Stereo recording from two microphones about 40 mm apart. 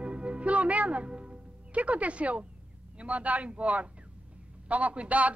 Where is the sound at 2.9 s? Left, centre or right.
Right.